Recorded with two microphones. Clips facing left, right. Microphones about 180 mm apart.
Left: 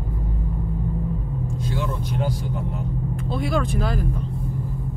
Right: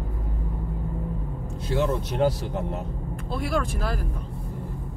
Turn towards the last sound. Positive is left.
turn(degrees=0)  # may be behind; listen again after turning